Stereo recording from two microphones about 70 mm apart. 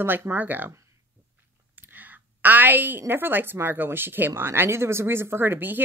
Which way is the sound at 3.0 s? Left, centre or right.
Right.